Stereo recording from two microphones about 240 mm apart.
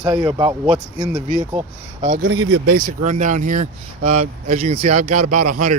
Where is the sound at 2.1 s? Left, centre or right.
Right.